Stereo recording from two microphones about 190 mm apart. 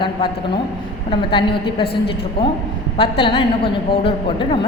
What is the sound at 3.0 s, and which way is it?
A woman's voice, 25° left (ahead or behind).